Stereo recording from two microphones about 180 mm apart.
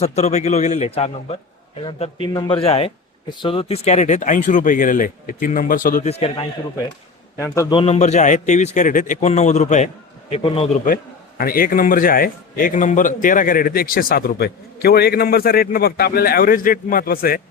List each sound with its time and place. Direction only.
0.0 s a man's voice: 35° left (ahead or behind)
6.1 s a man's voice: 35° left (ahead or behind)
7.3 s a man's voice: 15° left (ahead or behind)
7.8 s a man's voice: 40° left (ahead or behind)
10.8 s a man's voice: 50° left (ahead or behind)